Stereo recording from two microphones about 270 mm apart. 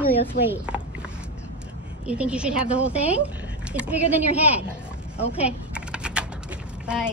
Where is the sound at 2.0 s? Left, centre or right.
Centre.